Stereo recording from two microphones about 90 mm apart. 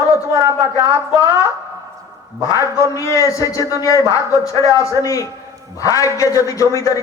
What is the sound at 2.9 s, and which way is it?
A man's voice, 35° left (ahead or behind).